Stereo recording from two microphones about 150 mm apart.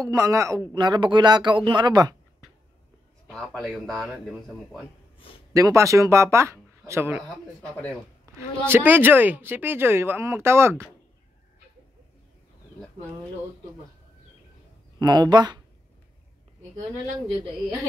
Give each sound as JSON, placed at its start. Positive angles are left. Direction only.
{"t": 0.0, "sound": "speech", "side_deg": -20}
{"t": 3.3, "sound": "a man's voice", "side_deg": 5}
{"t": 5.5, "sound": "a woman's voice", "side_deg": -20}
{"t": 8.4, "sound": "a woman's voice", "side_deg": -15}
{"t": 15.0, "sound": "speech", "side_deg": -25}